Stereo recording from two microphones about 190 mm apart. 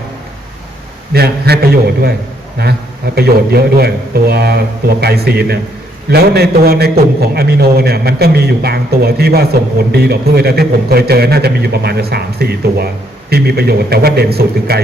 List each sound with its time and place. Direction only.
1.1 s a man's voice: 55° right (ahead or behind)
3.2 s a man's voice: 55° right (ahead or behind)